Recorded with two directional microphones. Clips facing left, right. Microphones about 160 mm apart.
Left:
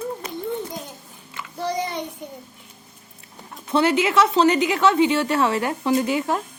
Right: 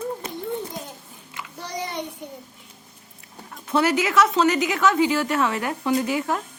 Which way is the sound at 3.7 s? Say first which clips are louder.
Left 2 dB; 25° left (ahead or behind).